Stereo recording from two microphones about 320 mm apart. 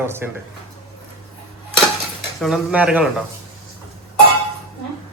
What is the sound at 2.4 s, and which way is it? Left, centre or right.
Speech, centre.